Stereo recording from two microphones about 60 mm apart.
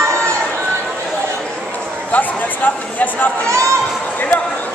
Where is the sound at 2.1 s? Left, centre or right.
Left.